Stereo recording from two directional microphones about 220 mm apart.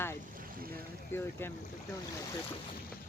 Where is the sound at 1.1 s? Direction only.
10° left (ahead or behind).